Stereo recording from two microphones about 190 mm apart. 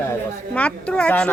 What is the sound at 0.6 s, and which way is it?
Speech, 5° left (ahead or behind).